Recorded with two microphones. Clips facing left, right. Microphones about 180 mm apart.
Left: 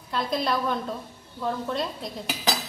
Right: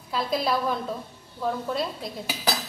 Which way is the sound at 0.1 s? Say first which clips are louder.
Right 1 dB; 5° right (ahead or behind).